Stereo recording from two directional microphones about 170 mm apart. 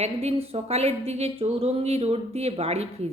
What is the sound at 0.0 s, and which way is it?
A woman's voice, 35° right (ahead or behind).